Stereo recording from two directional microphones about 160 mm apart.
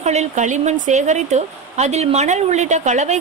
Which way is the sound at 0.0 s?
45° right (ahead or behind).